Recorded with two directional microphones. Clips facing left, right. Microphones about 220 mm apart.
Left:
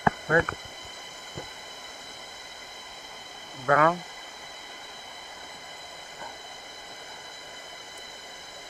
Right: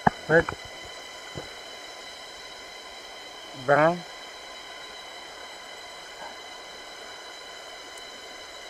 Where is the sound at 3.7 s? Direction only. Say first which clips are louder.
Right 2 dB; 25° right (ahead or behind).